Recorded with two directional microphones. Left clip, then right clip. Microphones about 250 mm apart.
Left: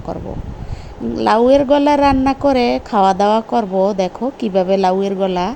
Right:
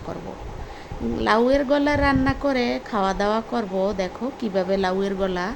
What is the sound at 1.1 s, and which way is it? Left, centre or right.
A woman's voice, centre.